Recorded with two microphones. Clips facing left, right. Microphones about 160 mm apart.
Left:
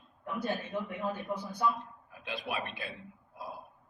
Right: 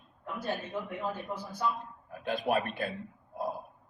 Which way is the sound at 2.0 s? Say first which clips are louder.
Right 9 dB; 50° right (ahead or behind).